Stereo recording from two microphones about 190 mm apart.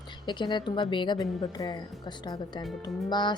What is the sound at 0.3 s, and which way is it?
Speech, 25° left (ahead or behind).